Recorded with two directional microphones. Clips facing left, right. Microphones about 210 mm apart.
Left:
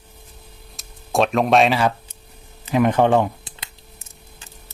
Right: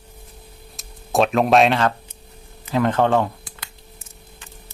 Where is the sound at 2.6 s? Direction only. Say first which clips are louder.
Left 2 dB; 15° left (ahead or behind).